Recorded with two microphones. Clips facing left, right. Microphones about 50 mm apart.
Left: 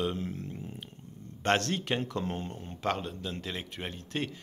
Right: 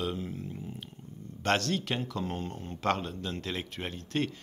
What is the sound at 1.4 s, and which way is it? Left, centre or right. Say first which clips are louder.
Speech: left 1 dB; left.